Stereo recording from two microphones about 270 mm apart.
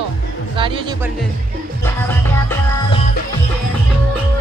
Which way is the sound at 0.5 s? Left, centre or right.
Centre.